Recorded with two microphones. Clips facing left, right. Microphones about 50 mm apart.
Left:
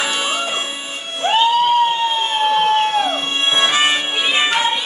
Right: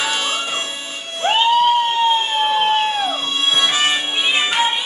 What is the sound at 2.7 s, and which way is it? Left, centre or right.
Music, left.